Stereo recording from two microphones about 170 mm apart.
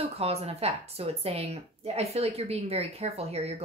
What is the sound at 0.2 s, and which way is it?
A woman's voice, 35° right (ahead or behind).